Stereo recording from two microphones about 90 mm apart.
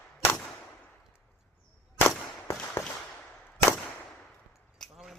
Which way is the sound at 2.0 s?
30° left (ahead or behind).